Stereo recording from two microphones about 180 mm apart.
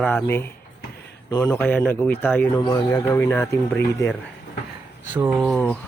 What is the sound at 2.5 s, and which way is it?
Speech, 20° left (ahead or behind).